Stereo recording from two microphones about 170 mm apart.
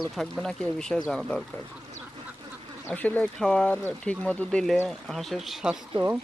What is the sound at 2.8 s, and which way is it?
Speech, 10° left (ahead or behind).